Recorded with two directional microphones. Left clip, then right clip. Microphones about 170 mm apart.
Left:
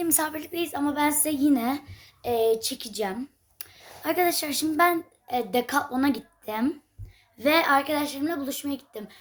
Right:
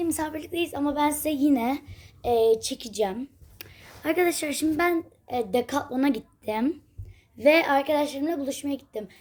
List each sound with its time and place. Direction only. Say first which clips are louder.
0.0 s a woman's voice: left 1 dB; 5° left (ahead or behind); by 9.1 s 15° right (ahead or behind)